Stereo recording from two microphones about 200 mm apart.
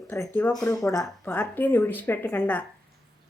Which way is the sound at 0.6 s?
15° left (ahead or behind).